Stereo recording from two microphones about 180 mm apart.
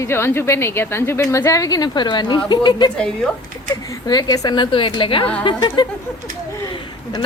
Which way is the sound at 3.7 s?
20° left (ahead or behind).